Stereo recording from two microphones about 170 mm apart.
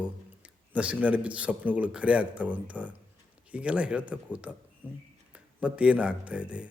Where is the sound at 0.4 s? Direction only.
10° right (ahead or behind).